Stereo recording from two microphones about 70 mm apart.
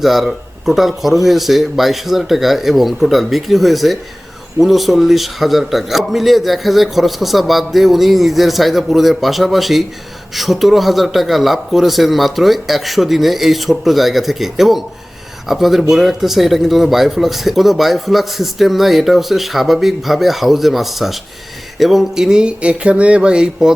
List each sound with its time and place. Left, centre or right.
0.0 s speech: centre